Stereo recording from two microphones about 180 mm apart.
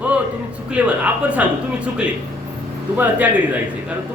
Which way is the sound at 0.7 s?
10° right (ahead or behind).